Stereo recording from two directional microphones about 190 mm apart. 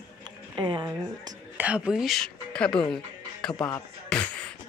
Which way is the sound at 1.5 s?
5° right (ahead or behind).